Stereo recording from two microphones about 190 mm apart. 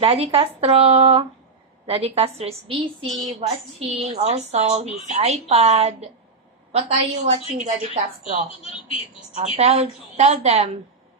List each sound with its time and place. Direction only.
0.0 s a woman's voice: 30° right (ahead or behind)
9.3 s a woman's voice: 35° right (ahead or behind)